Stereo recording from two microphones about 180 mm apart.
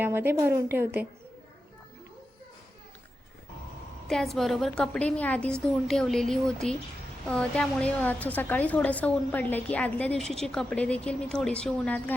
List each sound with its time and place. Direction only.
0.0 s a woman's voice: 10° right (ahead or behind)
4.1 s a woman's voice: centre (ahead or behind)